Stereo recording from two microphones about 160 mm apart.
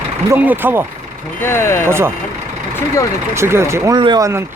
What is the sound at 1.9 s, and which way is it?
Speech, 15° right (ahead or behind).